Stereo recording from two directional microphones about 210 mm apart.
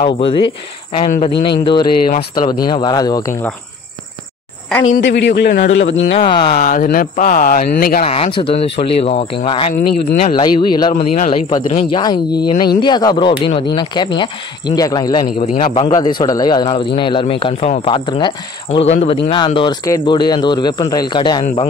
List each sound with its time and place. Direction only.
0.0 s speech: 25° left (ahead or behind)
1.0 s a man's voice: 40° left (ahead or behind)
1.4 s speech: 25° left (ahead or behind)
4.9 s a man's voice: 55° left (ahead or behind)
6.5 s speech: 40° left (ahead or behind)
8.0 s speech: 30° left (ahead or behind)
11.0 s a man's voice: 40° left (ahead or behind)
11.7 s speech: 20° left (ahead or behind)
15.3 s a man's voice: 40° left (ahead or behind)
15.9 s speech: 20° left (ahead or behind)